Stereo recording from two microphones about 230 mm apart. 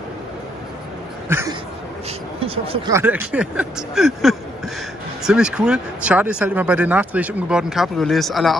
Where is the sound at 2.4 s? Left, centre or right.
Right.